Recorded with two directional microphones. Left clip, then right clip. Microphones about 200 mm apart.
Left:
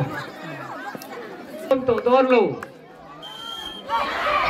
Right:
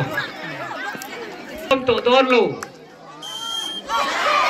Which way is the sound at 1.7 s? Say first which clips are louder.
Right 2 dB; 40° left (ahead or behind).